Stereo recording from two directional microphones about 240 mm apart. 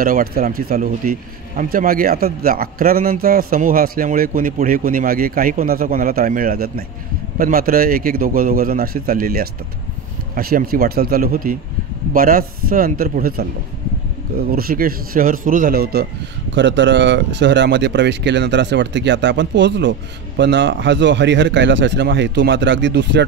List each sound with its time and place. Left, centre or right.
0.0 s speech: right
14.5 s speech: right